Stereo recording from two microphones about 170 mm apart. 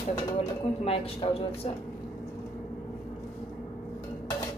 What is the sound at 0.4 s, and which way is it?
Speech, 35° left (ahead or behind).